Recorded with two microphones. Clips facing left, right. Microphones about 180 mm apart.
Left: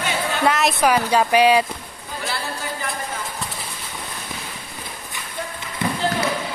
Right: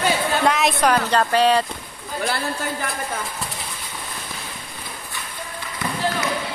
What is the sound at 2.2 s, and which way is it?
Speech, 55° right (ahead or behind).